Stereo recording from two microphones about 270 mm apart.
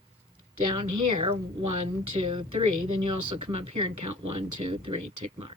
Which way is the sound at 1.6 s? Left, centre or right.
Right.